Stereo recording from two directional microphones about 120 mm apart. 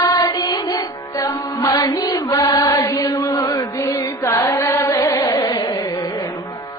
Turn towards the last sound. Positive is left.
turn(degrees=30)  # may be behind; listen again after turning